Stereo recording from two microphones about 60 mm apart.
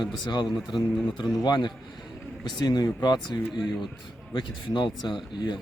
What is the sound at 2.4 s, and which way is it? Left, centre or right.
Speech, left.